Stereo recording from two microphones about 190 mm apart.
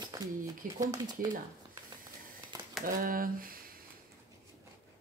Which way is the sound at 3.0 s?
45° right (ahead or behind).